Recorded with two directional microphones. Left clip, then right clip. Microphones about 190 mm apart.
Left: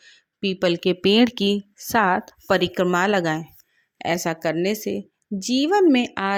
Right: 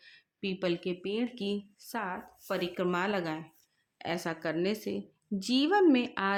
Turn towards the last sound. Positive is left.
turn(degrees=35)  # may be behind; listen again after turning